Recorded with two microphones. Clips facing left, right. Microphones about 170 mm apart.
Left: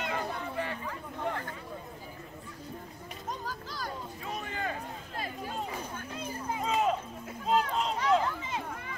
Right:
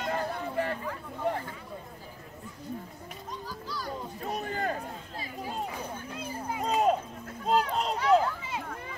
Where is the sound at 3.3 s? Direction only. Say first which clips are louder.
Left 1 dB; 45° left (ahead or behind).